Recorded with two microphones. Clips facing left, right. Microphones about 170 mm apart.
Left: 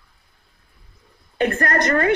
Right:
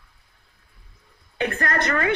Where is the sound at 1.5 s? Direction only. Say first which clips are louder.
Left 3 dB; 40° left (ahead or behind).